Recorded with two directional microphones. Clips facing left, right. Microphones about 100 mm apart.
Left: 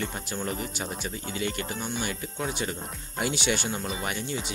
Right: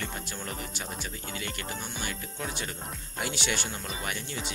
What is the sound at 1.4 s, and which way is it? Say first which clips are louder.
Speech: left 8 dB; 20° left (ahead or behind).